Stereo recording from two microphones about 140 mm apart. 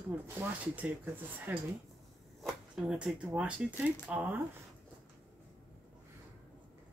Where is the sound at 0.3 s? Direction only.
10° right (ahead or behind).